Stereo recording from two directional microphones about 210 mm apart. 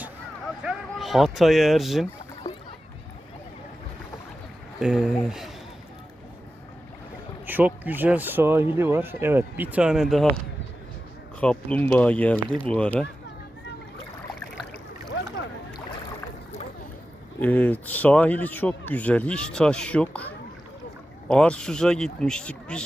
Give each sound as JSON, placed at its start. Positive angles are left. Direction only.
{"t": 0.6, "sound": "speech", "side_deg": 0}
{"t": 4.8, "sound": "speech", "side_deg": -5}
{"t": 7.4, "sound": "speech", "side_deg": -10}
{"t": 11.3, "sound": "speech", "side_deg": 5}
{"t": 15.1, "sound": "boat", "side_deg": 60}
{"t": 17.4, "sound": "speech", "side_deg": 10}